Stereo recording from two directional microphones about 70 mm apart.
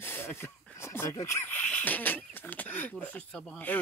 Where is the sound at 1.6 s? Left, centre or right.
Left.